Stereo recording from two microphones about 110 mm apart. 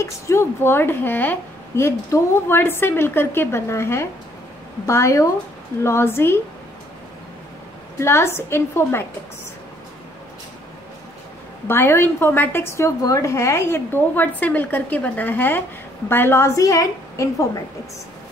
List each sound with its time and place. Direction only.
0.0 s a woman's voice: 25° left (ahead or behind)
8.0 s a woman's voice: 20° left (ahead or behind)
11.6 s a woman's voice: 20° left (ahead or behind)